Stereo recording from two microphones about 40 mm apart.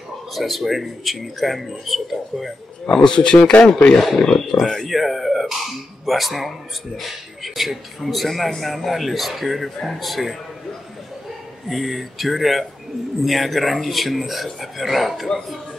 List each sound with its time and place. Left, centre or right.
0.3 s speech: centre
2.9 s speech: centre
4.8 s speech: centre
11.7 s speech: centre